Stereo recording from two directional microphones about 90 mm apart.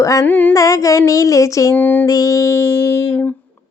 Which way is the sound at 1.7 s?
20° left (ahead or behind).